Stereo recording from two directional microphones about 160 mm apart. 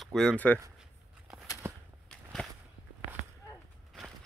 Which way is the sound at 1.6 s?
15° right (ahead or behind).